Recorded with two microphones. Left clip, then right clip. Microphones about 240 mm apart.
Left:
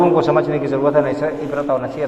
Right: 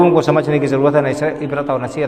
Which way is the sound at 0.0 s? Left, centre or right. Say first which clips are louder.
Right 2 dB; right.